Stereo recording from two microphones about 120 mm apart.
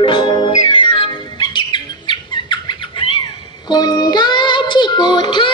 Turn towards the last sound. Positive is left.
turn(degrees=40)  # may be behind; listen again after turning